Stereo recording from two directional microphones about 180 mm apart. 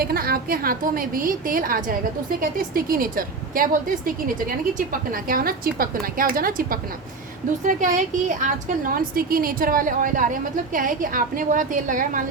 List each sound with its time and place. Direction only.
0.0 s a woman's voice: 55° right (ahead or behind)